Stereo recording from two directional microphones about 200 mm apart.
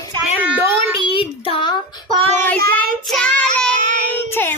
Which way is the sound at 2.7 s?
5° left (ahead or behind).